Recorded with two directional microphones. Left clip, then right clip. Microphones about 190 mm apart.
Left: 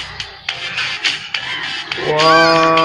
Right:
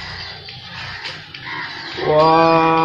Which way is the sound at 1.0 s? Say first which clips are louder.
Left 12 dB; 45° left (ahead or behind).